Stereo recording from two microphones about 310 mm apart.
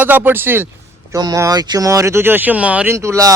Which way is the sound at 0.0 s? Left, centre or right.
Centre.